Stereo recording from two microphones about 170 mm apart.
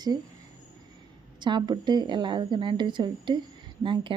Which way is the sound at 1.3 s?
25° right (ahead or behind).